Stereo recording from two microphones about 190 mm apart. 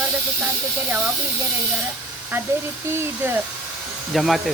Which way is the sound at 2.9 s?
10° right (ahead or behind).